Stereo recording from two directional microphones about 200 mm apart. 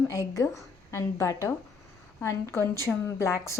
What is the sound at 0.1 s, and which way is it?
A woman's voice, 15° left (ahead or behind).